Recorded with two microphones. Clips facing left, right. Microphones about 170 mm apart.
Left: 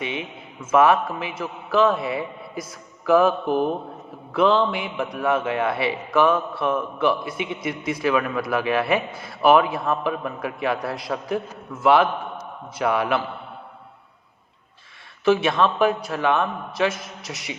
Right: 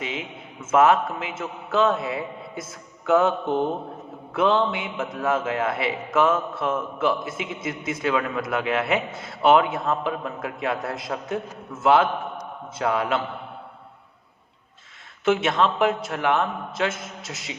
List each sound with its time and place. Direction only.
0.0 s a sound: 25° left (ahead or behind)
0.6 s a man's voice: 25° right (ahead or behind)
2.0 s speech: 25° left (ahead or behind)
2.6 s a man's voice: 25° right (ahead or behind)
5.4 s speech: 25° left (ahead or behind)
5.9 s a man's voice: 25° right (ahead or behind)
7.3 s speech: 25° left (ahead or behind)
7.9 s a man's voice: 25° right (ahead or behind)
15.2 s a man's voice: 20° right (ahead or behind)